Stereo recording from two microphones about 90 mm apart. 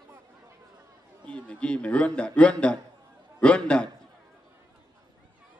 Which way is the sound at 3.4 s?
10° left (ahead or behind).